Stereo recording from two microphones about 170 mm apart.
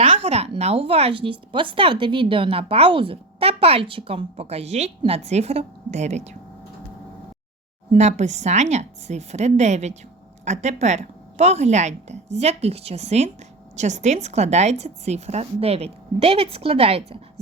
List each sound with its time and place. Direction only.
0.0 s speech: 35° right (ahead or behind)
7.9 s speech: 40° right (ahead or behind)